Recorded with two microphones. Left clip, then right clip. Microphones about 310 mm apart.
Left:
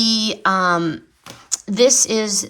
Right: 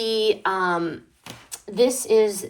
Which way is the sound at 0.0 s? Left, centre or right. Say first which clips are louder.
Left 3 dB; left.